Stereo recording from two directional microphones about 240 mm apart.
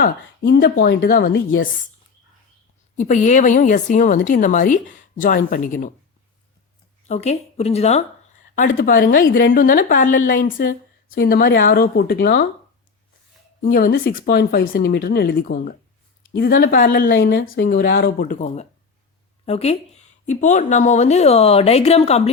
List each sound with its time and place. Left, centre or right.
0.0 s a woman's voice: left
3.0 s a woman's voice: left
7.1 s a woman's voice: left
13.6 s a woman's voice: left